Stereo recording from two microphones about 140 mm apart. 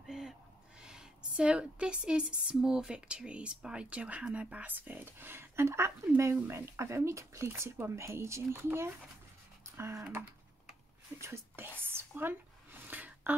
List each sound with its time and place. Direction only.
0.0 s speech: 5° right (ahead or behind); by 10.0 s 20° right (ahead or behind)
11.1 s whispering: 20° right (ahead or behind)